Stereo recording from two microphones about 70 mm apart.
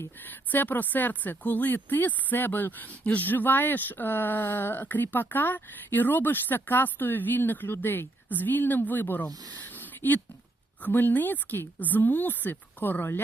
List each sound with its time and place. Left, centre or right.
0.3 s speech: left
9.6 s a sound: left
10.8 s speech: left